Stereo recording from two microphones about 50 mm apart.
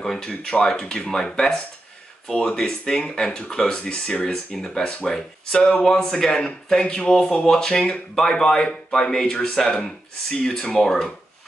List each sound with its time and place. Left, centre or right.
0.0 s speech: centre